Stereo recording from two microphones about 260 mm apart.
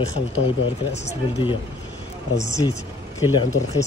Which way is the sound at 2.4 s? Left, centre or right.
Centre.